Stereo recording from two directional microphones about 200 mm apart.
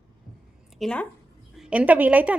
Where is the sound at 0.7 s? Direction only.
5° left (ahead or behind).